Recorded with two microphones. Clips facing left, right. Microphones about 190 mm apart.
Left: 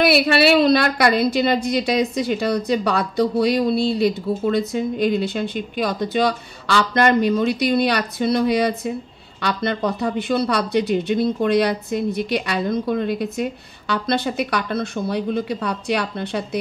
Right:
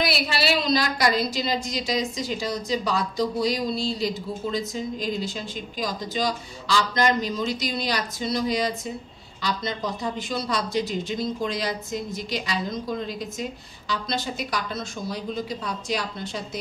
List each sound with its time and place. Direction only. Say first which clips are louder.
0.0 s a woman's voice: left 9 dB; 60° left (ahead or behind)